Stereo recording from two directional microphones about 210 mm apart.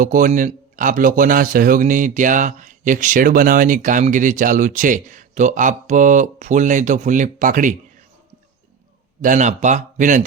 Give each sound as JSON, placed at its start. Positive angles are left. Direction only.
{"t": 0.0, "sound": "speech", "side_deg": -40}
{"t": 9.2, "sound": "speech", "side_deg": -35}